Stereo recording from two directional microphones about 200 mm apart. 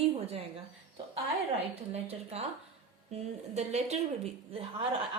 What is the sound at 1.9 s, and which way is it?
Speech, 30° right (ahead or behind).